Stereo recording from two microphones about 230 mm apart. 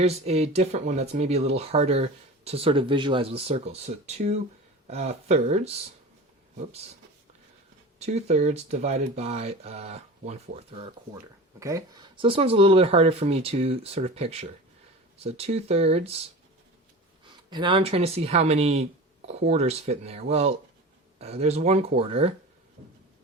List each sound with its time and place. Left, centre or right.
0.0 s speech: right
7.9 s speech: right
17.5 s speech: right